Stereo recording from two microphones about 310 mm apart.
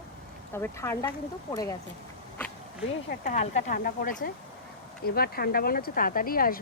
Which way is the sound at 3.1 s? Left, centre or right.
Left.